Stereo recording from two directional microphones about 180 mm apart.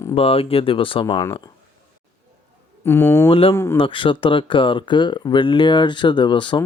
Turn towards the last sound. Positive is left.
turn(degrees=25)  # may be behind; listen again after turning